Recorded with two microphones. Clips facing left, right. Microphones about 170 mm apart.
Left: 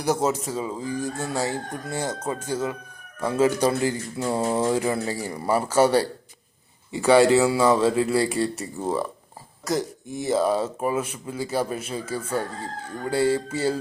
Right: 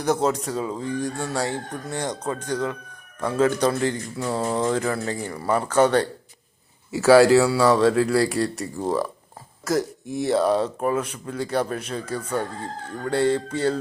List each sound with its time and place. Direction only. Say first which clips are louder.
0.0 s speech: right 1 dB; 10° left (ahead or behind)
4.2 s mantra: left 1 dB; 25° left (ahead or behind)
4.4 s speech: even; 10° left (ahead or behind)
6.9 s speech: right 3 dB; 5° right (ahead or behind)